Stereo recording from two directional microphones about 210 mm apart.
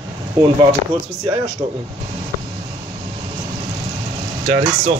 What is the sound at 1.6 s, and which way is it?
Speech, 30° right (ahead or behind).